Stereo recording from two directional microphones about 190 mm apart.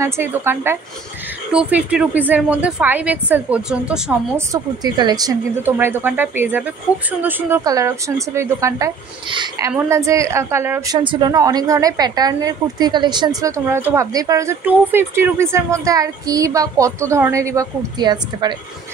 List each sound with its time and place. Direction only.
0.0 s a woman's voice: 10° right (ahead or behind)
4.5 s a woman's voice: 20° right (ahead or behind)
11.0 s a woman's voice: 25° right (ahead or behind)